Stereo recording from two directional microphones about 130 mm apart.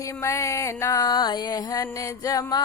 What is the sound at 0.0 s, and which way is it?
Music, 20° left (ahead or behind).